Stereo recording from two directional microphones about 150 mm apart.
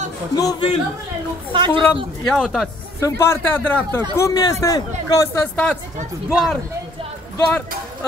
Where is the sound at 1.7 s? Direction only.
15° left (ahead or behind).